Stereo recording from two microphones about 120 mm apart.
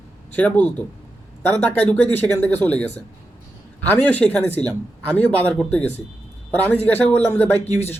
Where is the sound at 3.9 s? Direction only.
10° left (ahead or behind).